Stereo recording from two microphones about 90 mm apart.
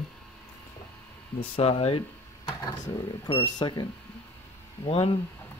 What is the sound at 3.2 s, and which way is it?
Speech, 65° left (ahead or behind).